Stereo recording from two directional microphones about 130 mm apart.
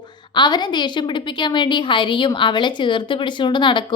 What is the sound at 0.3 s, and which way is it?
A woman's voice, 35° left (ahead or behind).